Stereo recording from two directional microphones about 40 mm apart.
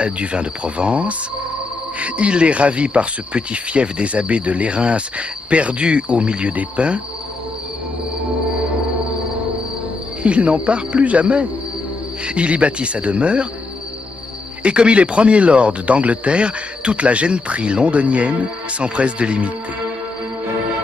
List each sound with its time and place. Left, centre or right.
0.0 s speech: right
10.2 s speech: right
14.6 s speech: right